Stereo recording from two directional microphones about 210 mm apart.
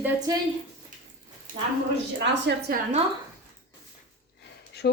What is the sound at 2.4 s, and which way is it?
Speech, 45° right (ahead or behind).